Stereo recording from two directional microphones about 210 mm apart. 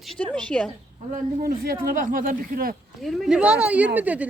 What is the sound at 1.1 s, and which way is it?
Speech, 40° right (ahead or behind).